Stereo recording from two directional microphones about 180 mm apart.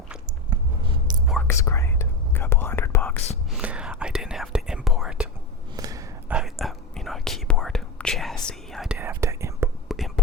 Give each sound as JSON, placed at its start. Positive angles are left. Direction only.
{"t": 0.5, "sound": "a sound", "side_deg": -25}
{"t": 1.5, "sound": "whispering", "side_deg": 15}
{"t": 3.5, "sound": "whispering", "side_deg": -5}
{"t": 5.7, "sound": "gasp", "side_deg": -20}
{"t": 6.3, "sound": "whispering", "side_deg": 0}
{"t": 9.0, "sound": "whispering", "side_deg": -15}
{"t": 9.9, "sound": "a sound", "side_deg": 0}